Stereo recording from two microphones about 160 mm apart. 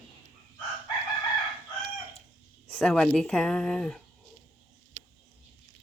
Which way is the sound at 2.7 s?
5° left (ahead or behind).